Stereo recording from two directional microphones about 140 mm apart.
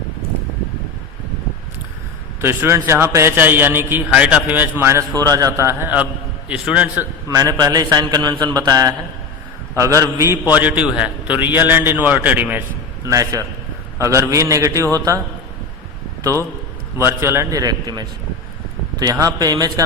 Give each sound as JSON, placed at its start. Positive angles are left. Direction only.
{"t": 2.4, "sound": "a man's voice", "side_deg": -15}
{"t": 7.3, "sound": "mantra", "side_deg": -25}
{"t": 10.5, "sound": "a man's voice", "side_deg": -10}
{"t": 13.1, "sound": "mantra", "side_deg": -25}
{"t": 17.0, "sound": "mantra", "side_deg": -20}